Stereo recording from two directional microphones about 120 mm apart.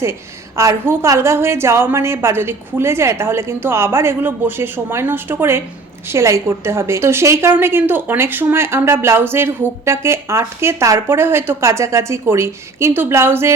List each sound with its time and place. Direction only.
0.0 s a woman's voice: 25° right (ahead or behind)